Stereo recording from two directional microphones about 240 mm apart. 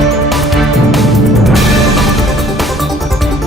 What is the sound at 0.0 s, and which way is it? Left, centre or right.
Music, centre.